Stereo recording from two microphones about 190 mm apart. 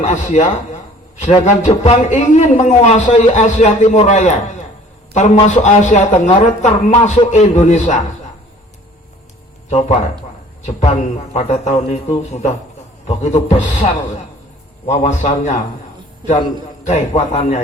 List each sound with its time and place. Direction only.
0.0 s a man's voice: 35° left (ahead or behind)
9.6 s a man's voice: 35° left (ahead or behind)
16.8 s a man's voice: 35° left (ahead or behind)